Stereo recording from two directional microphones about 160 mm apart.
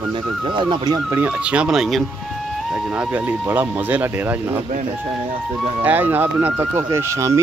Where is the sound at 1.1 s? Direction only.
10° right (ahead or behind).